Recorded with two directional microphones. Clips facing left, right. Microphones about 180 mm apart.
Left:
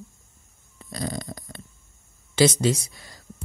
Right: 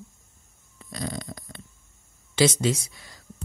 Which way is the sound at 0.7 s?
40° left (ahead or behind).